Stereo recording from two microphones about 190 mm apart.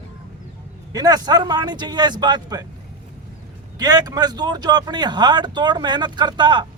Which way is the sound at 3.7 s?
20° right (ahead or behind).